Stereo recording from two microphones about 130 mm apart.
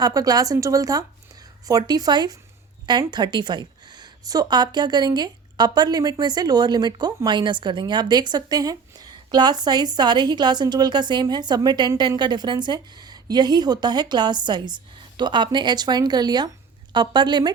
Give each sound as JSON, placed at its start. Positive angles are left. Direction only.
{"t": 0.0, "sound": "a woman's voice", "side_deg": -30}